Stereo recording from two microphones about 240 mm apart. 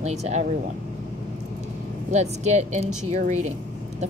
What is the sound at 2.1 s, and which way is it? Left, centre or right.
Speech, right.